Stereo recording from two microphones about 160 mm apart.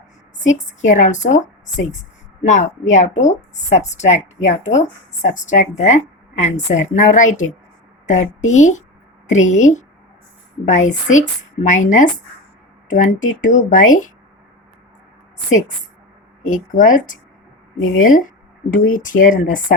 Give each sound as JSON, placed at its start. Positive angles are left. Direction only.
{"t": 0.4, "sound": "a woman's voice", "side_deg": 50}
{"t": 16.7, "sound": "speech", "side_deg": 55}